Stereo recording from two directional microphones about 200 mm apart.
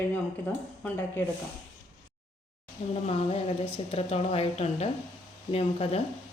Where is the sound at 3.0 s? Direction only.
30° left (ahead or behind).